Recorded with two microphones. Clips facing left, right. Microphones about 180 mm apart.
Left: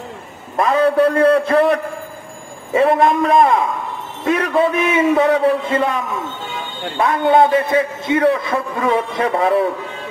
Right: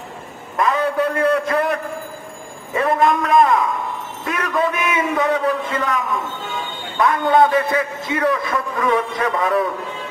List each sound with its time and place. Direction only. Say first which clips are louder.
0.6 s a man's voice: left 5 dB; 30° left (ahead or behind)
7.0 s a man's voice: left 2 dB; 30° left (ahead or behind)